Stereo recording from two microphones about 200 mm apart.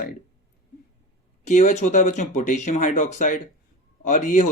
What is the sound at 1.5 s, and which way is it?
Speech, 35° left (ahead or behind).